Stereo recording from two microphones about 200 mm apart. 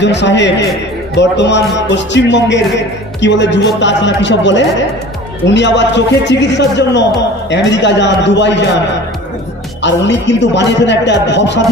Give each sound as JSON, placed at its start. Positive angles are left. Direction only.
{"t": 0.0, "sound": "a man's voice", "side_deg": 60}
{"t": 9.8, "sound": "a man's voice", "side_deg": 60}